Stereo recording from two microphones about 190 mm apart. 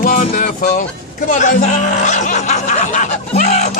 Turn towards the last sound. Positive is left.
turn(degrees=40)  # may be behind; listen again after turning